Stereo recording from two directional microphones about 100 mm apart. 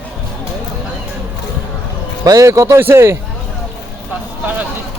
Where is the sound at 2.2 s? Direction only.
35° right (ahead or behind).